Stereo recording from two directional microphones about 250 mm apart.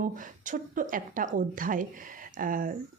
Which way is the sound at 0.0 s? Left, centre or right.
Right.